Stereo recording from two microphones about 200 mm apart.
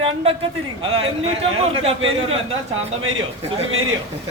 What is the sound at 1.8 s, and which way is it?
Speech, 30° right (ahead or behind).